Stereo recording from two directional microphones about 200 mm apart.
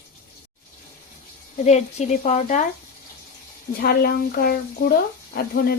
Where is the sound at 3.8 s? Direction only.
50° left (ahead or behind).